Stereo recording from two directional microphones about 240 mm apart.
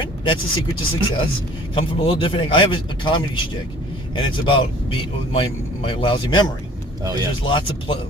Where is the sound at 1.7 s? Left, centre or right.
Left.